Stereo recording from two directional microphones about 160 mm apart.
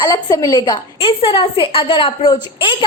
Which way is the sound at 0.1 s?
20° left (ahead or behind).